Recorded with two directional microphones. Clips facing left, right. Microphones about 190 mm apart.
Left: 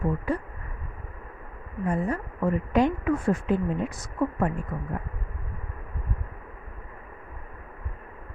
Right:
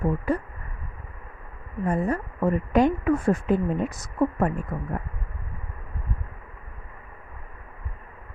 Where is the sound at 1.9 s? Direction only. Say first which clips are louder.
Right 2 dB; 45° right (ahead or behind).